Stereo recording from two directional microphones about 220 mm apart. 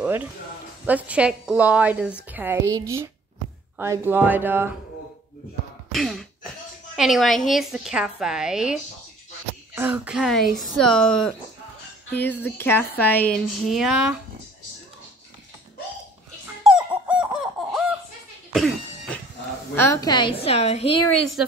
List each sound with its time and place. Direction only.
0.0 s a sound: 5° right (ahead or behind)
0.8 s a woman's voice: 5° right (ahead or behind)
5.9 s a sound: centre (ahead or behind)
7.0 s a woman's voice: centre (ahead or behind)
9.8 s a woman's voice: 5° right (ahead or behind)
16.6 s a sound: 5° right (ahead or behind)
18.5 s cough: centre (ahead or behind)
19.7 s a woman's voice: 10° left (ahead or behind)
21.1 s a woman's voice: centre (ahead or behind)